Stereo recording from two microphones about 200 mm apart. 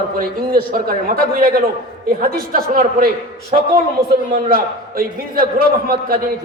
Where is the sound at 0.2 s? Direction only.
45° right (ahead or behind).